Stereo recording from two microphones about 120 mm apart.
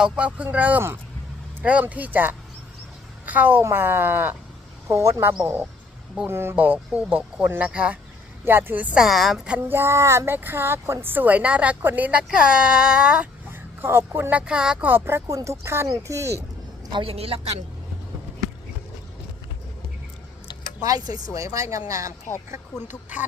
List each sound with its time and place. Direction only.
0.0 s a woman's voice: 10° right (ahead or behind)
9.0 s a woman's voice: centre (ahead or behind)
9.6 s a woman's voice: 20° right (ahead or behind)
13.5 s a woman's voice: 20° right (ahead or behind)
16.9 s a woman's voice: 50° right (ahead or behind)
20.8 s speech: 30° right (ahead or behind)